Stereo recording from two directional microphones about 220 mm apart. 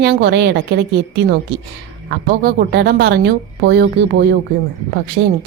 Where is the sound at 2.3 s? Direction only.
45° right (ahead or behind).